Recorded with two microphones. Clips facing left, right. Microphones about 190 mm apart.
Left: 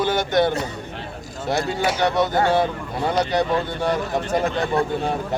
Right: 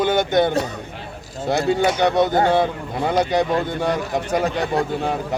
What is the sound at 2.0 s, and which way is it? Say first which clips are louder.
Speech: right 3 dB; 20° right (ahead or behind).